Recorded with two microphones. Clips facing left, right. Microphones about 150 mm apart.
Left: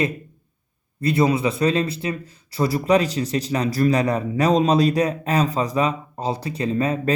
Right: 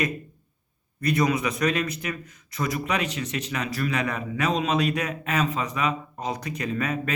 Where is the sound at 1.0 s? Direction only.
30° left (ahead or behind).